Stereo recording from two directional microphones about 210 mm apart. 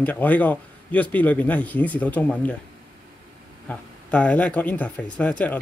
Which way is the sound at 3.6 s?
5° left (ahead or behind).